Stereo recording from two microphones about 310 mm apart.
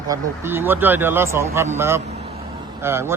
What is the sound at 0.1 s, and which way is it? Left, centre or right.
A man's voice, centre.